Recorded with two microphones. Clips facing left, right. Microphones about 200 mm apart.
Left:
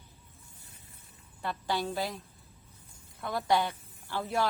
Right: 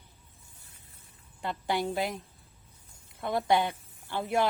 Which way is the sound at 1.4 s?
20° right (ahead or behind).